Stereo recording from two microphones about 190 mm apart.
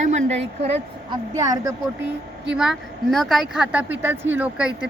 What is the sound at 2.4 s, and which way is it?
Speech, 5° right (ahead or behind).